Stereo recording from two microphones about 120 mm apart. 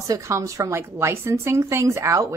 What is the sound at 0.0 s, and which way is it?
A woman's voice, 25° right (ahead or behind).